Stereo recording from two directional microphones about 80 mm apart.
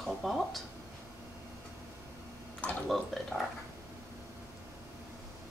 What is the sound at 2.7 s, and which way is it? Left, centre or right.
Speech, centre.